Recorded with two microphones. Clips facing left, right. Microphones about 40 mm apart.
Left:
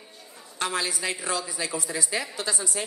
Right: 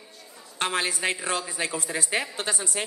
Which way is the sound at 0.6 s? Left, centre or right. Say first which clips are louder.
Right 2 dB; right.